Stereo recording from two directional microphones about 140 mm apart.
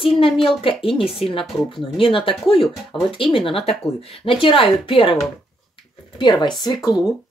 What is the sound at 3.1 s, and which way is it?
Speech, 40° left (ahead or behind).